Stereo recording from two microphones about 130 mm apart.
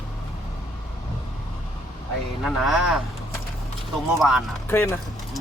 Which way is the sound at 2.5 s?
Centre (ahead or behind).